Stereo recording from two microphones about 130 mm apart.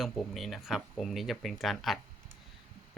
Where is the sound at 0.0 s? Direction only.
Centre (ahead or behind).